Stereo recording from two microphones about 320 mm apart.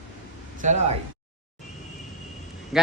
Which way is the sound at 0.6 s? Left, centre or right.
Right.